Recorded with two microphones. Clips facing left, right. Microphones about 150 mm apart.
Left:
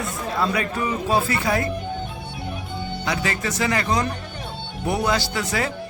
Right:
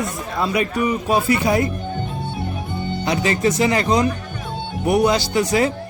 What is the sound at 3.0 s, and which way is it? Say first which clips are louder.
A man's voice: right 7 dB; 25° right (ahead or behind).